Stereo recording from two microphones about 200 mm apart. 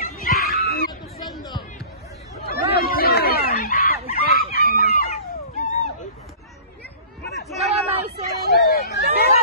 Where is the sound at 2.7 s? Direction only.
50° left (ahead or behind).